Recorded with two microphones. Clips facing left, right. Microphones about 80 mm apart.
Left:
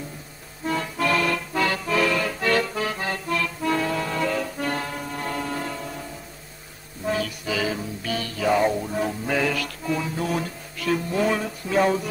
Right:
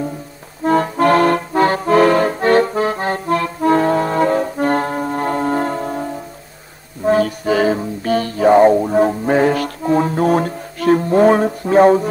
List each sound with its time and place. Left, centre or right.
0.7 s accordion: right
7.1 s music: right